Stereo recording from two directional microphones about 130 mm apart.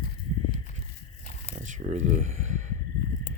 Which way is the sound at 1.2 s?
70° left (ahead or behind).